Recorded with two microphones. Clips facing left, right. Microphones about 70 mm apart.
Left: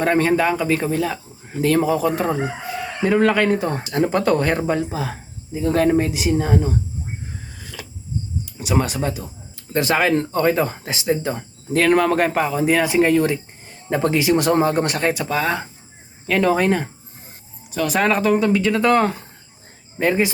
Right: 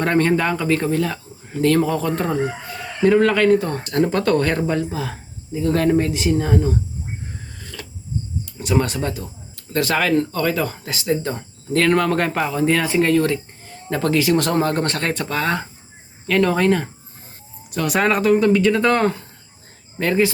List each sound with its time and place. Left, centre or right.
0.0 s speech: centre
7.6 s a sound: centre
8.4 s speech: centre
17.7 s speech: centre
20.0 s speech: centre